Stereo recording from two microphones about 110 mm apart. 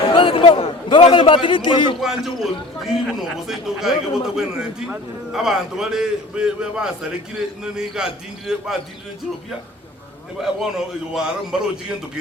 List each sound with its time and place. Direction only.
0.1 s a man's voice: 50° left (ahead or behind)
2.0 s a man's voice: 5° right (ahead or behind)
10.4 s a man's voice: 5° right (ahead or behind)